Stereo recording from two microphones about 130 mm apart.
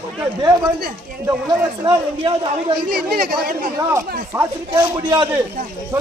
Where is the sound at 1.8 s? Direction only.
35° right (ahead or behind).